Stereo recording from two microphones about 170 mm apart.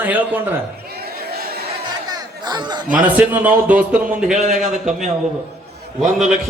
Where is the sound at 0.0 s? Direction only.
10° right (ahead or behind).